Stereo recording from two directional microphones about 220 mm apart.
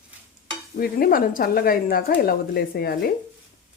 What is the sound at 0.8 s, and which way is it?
Speech, 40° left (ahead or behind).